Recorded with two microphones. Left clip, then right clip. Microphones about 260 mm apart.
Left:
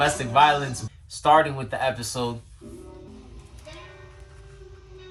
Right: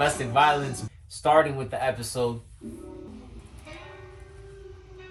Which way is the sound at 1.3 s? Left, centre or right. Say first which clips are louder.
Left 2 dB; centre.